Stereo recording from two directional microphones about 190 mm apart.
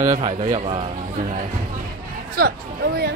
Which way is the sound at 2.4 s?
55° right (ahead or behind).